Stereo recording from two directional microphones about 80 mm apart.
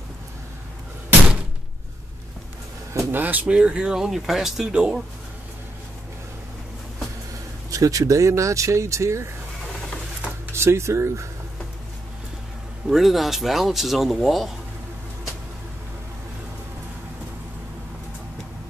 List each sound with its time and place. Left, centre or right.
2.9 s a sound: right
3.2 s speech: right
7.7 s speech: right
10.5 s speech: right
12.8 s speech: centre